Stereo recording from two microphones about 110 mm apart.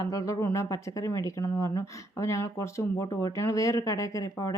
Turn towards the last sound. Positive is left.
turn(degrees=30)  # may be behind; listen again after turning